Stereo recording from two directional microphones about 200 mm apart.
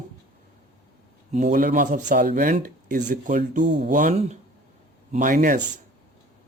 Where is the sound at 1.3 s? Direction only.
40° right (ahead or behind).